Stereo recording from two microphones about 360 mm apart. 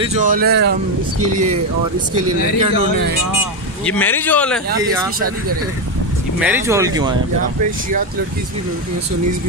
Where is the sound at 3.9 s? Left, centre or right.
Centre.